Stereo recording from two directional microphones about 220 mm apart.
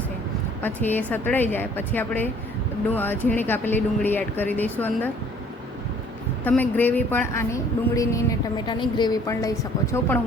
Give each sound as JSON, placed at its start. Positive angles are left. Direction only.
{"t": 0.6, "sound": "speech", "side_deg": 10}
{"t": 6.4, "sound": "speech", "side_deg": 10}